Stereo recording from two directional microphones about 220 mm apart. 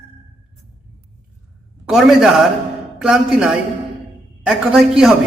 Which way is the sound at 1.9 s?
Centre (ahead or behind).